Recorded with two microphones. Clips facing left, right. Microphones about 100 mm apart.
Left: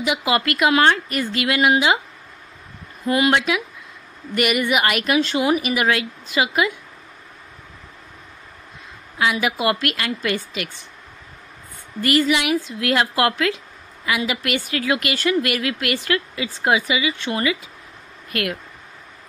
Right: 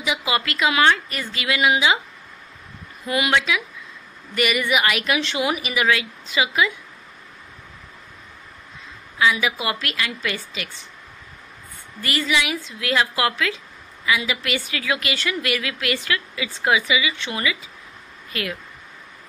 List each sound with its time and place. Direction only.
0.0 s a woman's voice: 55° left (ahead or behind)
3.1 s a woman's voice: 45° left (ahead or behind)
9.2 s a woman's voice: 55° left (ahead or behind)
12.0 s a woman's voice: 50° left (ahead or behind)